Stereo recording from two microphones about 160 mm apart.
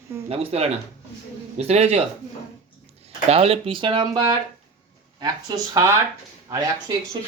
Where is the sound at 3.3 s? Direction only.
35° right (ahead or behind); by 6.7 s 20° right (ahead or behind).